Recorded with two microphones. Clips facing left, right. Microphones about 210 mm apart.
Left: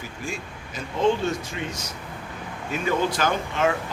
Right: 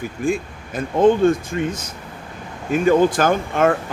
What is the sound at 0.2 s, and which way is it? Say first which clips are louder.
Speech: right 13 dB; 55° right (ahead or behind).